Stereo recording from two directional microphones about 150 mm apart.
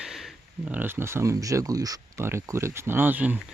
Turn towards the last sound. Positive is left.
turn(degrees=-10)  # may be behind; listen again after turning